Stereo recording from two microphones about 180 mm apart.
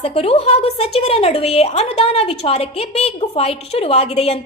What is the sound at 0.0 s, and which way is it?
A woman's voice, 30° left (ahead or behind).